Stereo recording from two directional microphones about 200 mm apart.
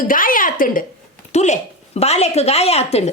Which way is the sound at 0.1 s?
45° left (ahead or behind).